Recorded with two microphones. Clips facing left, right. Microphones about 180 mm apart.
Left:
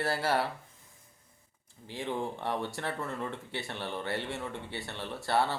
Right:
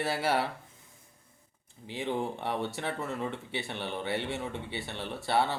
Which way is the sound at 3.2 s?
20° right (ahead or behind).